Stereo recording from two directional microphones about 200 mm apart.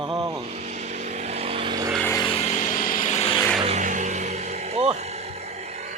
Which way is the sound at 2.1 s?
25° left (ahead or behind).